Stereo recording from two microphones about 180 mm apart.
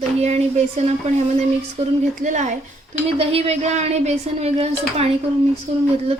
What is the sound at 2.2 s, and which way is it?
A woman's voice, 45° right (ahead or behind).